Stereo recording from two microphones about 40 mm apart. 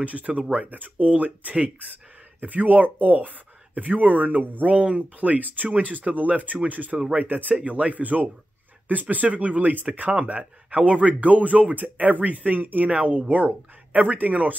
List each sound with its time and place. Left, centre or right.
0.0 s speech: right
4.6 s speech: right